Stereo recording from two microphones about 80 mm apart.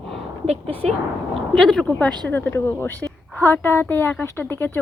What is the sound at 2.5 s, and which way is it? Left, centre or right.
A woman's voice, left.